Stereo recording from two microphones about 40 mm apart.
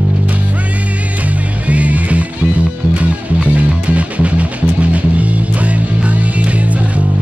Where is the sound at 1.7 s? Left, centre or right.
Right.